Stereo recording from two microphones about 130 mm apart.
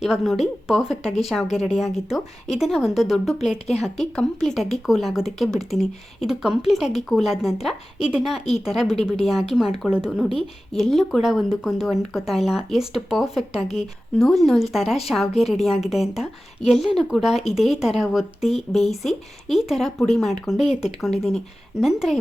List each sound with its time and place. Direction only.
0.0 s speech: centre (ahead or behind)
1.0 s speech: 55° left (ahead or behind)
1.7 s speech: centre (ahead or behind)